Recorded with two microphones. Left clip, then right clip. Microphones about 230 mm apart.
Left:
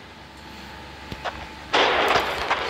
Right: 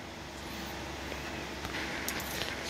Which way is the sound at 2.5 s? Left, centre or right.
Centre.